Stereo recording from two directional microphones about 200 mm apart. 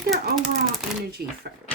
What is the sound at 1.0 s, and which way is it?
Speech, 50° right (ahead or behind).